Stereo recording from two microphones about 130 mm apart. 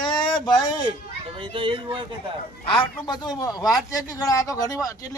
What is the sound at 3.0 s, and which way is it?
Speech, 35° left (ahead or behind).